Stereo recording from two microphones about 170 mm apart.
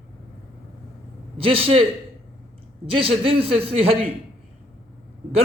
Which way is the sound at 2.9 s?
35° right (ahead or behind).